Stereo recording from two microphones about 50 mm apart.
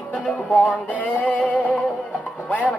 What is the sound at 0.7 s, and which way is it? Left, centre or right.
Music, right.